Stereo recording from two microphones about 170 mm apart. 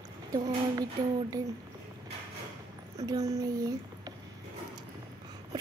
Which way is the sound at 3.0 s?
20° right (ahead or behind).